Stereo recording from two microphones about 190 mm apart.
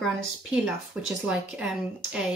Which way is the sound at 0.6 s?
5° right (ahead or behind).